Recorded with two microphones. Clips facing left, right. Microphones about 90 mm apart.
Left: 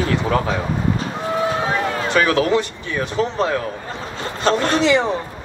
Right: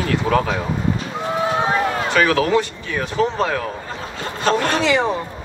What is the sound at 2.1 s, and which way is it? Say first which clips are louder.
Speech: even; 25° left (ahead or behind).